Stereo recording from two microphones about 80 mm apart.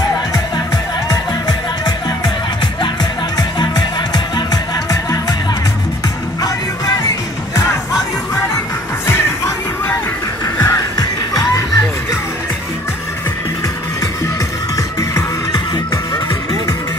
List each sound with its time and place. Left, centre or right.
1.9 s music: left
9.0 s music: left
15.0 s music: left